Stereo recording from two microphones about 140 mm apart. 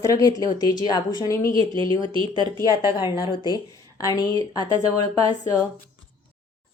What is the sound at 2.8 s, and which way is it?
Speech, 30° left (ahead or behind).